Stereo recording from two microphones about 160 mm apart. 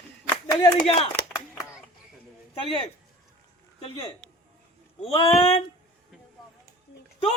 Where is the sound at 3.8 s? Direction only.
35° left (ahead or behind).